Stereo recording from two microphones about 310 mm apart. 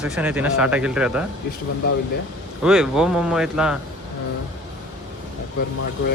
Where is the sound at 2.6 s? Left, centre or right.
Centre.